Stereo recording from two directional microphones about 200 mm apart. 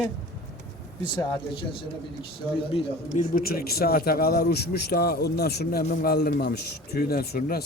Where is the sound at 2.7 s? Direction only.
40° left (ahead or behind).